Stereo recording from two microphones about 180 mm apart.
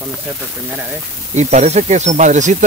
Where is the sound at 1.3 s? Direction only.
40° right (ahead or behind).